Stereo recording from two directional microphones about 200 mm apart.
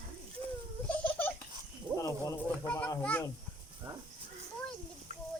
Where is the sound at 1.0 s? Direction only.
10° left (ahead or behind).